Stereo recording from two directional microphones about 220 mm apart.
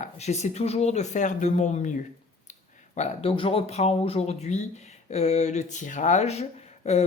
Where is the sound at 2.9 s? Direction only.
30° left (ahead or behind).